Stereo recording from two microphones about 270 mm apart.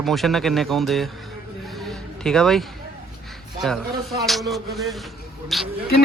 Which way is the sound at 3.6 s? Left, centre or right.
Centre.